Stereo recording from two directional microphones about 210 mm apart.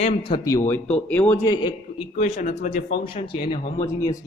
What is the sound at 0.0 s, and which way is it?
Speech, 25° left (ahead or behind).